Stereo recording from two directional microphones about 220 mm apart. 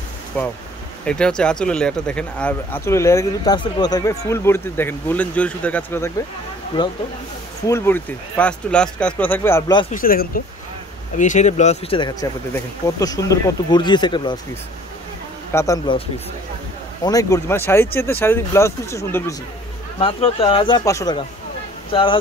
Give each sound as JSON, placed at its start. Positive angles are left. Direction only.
{"t": 0.3, "sound": "speech", "side_deg": 5}
{"t": 9.8, "sound": "speech", "side_deg": 40}
{"t": 15.5, "sound": "speech", "side_deg": 15}
{"t": 17.0, "sound": "speech", "side_deg": 15}